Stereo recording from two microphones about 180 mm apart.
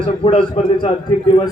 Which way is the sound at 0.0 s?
30° left (ahead or behind).